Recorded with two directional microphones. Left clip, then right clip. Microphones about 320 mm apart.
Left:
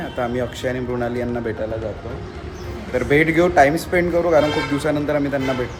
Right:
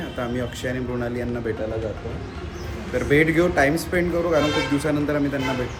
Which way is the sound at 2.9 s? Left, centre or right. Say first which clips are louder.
Left 2 dB; centre.